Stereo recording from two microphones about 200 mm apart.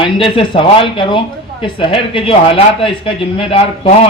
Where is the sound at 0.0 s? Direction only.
25° left (ahead or behind).